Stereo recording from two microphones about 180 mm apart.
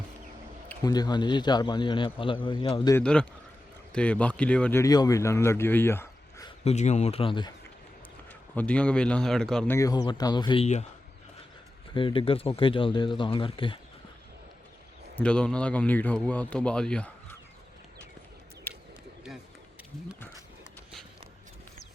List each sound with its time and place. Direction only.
0.9 s a man's voice: 20° left (ahead or behind)
2.9 s a man's voice: 5° left (ahead or behind)
6.7 s speech: 40° left (ahead or behind)
8.3 s a man's voice: 5° left (ahead or behind)
9.7 s a man's voice: 20° left (ahead or behind)
11.9 s a man's voice: 30° left (ahead or behind)
15.2 s speech: 5° left (ahead or behind)
18.7 s bird: 10° left (ahead or behind)
20.1 s horse: 10° left (ahead or behind)